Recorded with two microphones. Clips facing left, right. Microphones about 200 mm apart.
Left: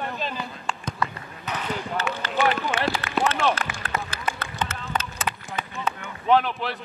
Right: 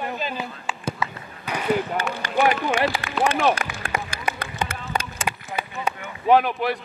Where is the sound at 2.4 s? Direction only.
10° right (ahead or behind).